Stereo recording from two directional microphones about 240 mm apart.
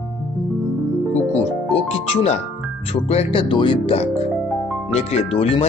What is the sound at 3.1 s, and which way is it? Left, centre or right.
Speech, left.